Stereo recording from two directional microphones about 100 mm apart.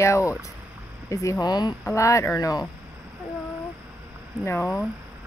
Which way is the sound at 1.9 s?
30° left (ahead or behind).